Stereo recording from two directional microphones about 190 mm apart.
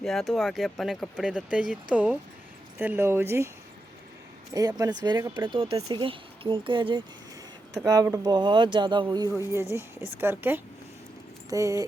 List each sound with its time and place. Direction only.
0.0 s speech: centre (ahead or behind)
4.5 s speech: 20° right (ahead or behind)